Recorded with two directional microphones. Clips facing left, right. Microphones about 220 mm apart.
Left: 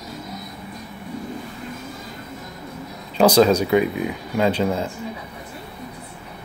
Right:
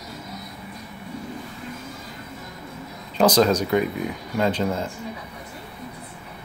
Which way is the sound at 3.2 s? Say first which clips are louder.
Left 3 dB; 10° left (ahead or behind).